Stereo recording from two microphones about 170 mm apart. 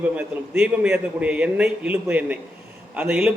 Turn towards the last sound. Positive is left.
turn(degrees=-5)  # may be behind; listen again after turning